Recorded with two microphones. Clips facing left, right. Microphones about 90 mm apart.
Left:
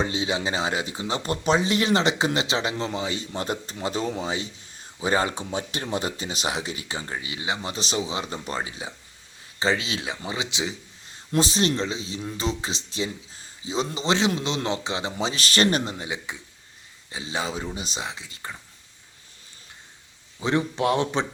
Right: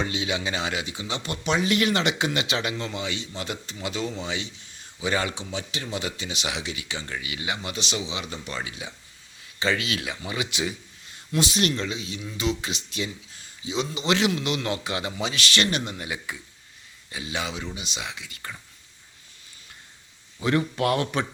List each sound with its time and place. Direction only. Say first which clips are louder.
0.0 s speech: left 2 dB; 35° left (ahead or behind)
11.3 s a man's voice: left 2 dB; 35° left (ahead or behind)
15.2 s speech: left 4 dB; 35° left (ahead or behind)
20.4 s speech: even; 25° left (ahead or behind)